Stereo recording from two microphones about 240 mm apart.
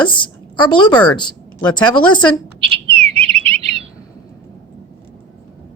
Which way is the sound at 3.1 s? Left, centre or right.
Right.